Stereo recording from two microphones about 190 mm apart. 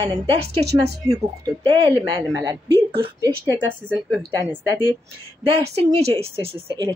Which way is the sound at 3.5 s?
10° right (ahead or behind).